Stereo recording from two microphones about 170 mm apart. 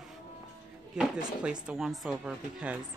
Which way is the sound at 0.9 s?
5° right (ahead or behind).